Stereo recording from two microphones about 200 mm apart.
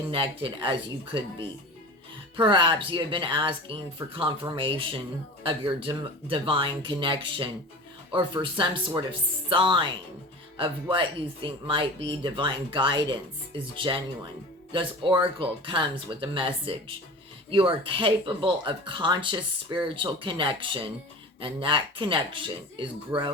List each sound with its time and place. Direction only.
0.1 s speech: 25° right (ahead or behind)